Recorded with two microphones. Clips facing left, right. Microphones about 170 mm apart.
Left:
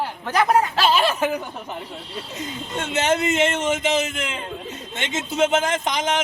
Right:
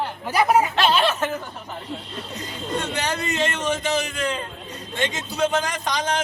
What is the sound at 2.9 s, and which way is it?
Speech, 20° left (ahead or behind).